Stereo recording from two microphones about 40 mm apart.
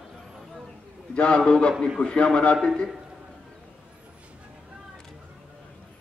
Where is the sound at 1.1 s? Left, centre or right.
Left.